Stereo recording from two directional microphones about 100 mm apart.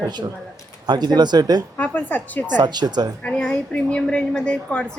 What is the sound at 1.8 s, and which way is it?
Speech, 15° left (ahead or behind).